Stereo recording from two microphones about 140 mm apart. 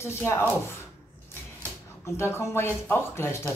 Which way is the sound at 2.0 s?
20° left (ahead or behind).